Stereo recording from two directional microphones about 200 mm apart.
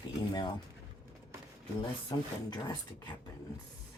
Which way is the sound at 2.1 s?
20° left (ahead or behind).